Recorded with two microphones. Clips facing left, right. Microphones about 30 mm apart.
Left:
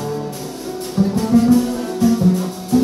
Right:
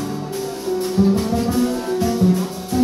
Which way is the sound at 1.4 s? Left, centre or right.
Centre.